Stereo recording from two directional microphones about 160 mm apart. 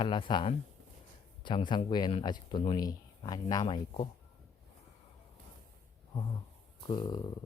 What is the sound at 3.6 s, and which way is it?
Speech, 40° left (ahead or behind).